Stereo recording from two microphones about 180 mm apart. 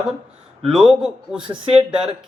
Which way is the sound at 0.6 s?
5° right (ahead or behind).